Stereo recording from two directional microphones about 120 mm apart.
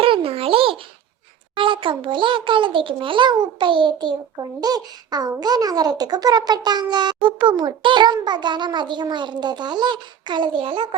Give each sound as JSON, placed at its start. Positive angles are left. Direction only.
{"t": 0.0, "sound": "babbling", "side_deg": -50}
{"t": 1.5, "sound": "a child's voice", "side_deg": -45}